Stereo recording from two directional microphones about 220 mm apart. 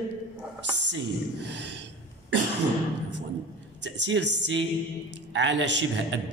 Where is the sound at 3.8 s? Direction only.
55° right (ahead or behind).